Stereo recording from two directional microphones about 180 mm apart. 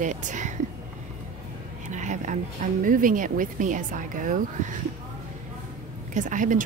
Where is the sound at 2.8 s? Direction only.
50° right (ahead or behind).